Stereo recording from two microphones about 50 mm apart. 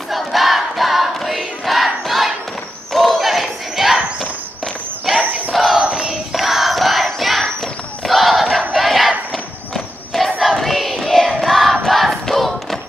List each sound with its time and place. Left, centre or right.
0.1 s battle cry: centre
2.0 s crowd: centre
2.9 s a sound: centre
5.1 s battle cry: centre
5.8 s battle cry: centre
6.3 s battle cry: centre
9.8 s crowd: centre
10.6 s music: centre
11.8 s crowd: centre